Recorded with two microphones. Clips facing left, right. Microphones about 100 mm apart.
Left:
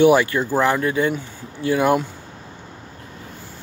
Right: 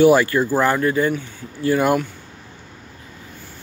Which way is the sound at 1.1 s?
15° left (ahead or behind).